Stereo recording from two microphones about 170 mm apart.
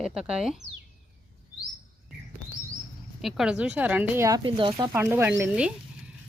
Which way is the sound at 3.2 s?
Centre (ahead or behind).